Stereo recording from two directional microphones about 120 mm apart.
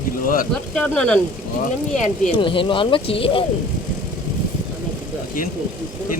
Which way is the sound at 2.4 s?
45° left (ahead or behind).